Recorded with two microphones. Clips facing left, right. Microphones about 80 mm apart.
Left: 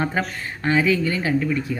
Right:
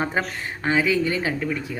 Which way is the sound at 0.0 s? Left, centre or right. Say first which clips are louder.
Left 1 dB; centre.